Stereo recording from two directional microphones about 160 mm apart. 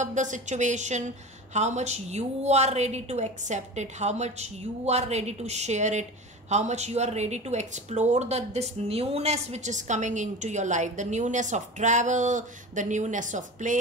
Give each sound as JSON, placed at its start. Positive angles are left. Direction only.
{"t": 0.0, "sound": "speech", "side_deg": -50}